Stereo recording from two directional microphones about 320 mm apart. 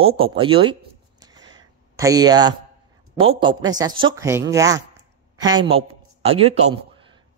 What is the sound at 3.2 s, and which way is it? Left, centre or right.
A woman's voice, centre.